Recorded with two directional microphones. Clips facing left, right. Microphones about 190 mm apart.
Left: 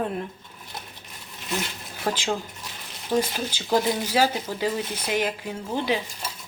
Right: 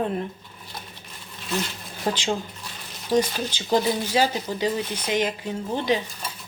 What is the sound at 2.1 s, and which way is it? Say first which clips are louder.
Speech: right 1 dB; 15° right (ahead or behind).